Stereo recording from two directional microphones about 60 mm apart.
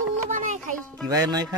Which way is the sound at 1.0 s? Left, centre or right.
Right.